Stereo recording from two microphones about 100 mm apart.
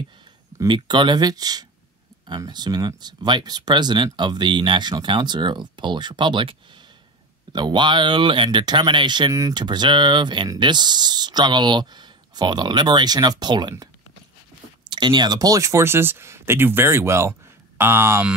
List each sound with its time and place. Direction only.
0.7 s speech: 50° right (ahead or behind)
7.5 s speech: 50° right (ahead or behind)
14.9 s speech: 50° right (ahead or behind); by 18.2 s 25° right (ahead or behind)